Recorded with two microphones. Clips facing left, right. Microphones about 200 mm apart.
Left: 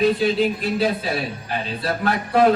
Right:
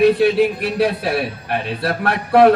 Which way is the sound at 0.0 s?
65° right (ahead or behind).